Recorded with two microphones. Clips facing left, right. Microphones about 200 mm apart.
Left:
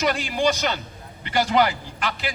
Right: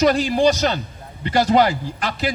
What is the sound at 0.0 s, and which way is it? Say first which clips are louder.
A man's voice: right 6 dB; 40° right (ahead or behind).